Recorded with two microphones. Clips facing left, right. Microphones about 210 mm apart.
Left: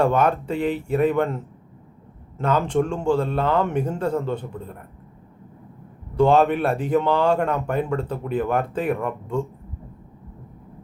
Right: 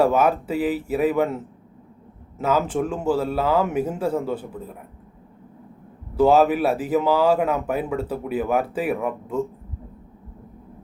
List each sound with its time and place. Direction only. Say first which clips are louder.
0.0 s speech: right 1 dB; 5° right (ahead or behind)
2.4 s speech: left 1 dB; 5° right (ahead or behind)
6.1 s speech: right 1 dB; 5° right (ahead or behind)